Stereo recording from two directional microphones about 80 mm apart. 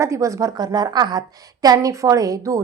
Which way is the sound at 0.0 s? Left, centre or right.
Right.